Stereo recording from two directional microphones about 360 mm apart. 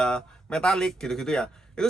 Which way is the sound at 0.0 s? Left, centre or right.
Centre.